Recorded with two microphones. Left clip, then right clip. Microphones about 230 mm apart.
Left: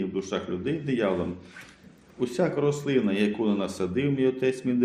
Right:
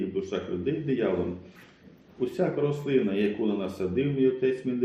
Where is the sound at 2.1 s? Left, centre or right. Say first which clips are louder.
Left 1 dB; left.